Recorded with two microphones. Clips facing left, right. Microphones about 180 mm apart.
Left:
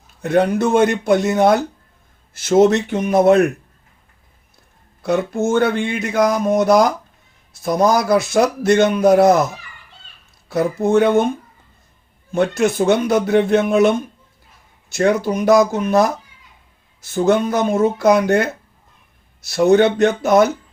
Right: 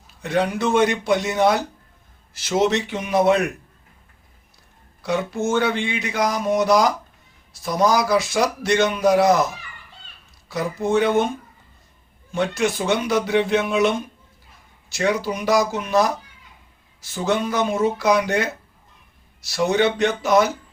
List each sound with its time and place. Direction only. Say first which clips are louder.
0.2 s speech: left 6 dB; 50° left (ahead or behind)
5.0 s speech: left 4 dB; 50° left (ahead or behind)
10.5 s speech: left 5 dB; 55° left (ahead or behind)
12.3 s speech: left 5 dB; 55° left (ahead or behind)
14.9 s speech: left 5 dB; 55° left (ahead or behind)
19.5 s speech: left 7 dB; 50° left (ahead or behind)